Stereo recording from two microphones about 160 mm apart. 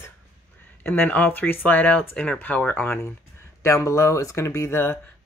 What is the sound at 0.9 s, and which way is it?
Speech, 10° left (ahead or behind).